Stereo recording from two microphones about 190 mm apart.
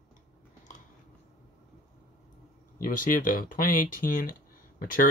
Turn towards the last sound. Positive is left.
turn(degrees=45)  # may be behind; listen again after turning